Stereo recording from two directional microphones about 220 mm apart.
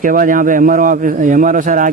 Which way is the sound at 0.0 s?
40° right (ahead or behind).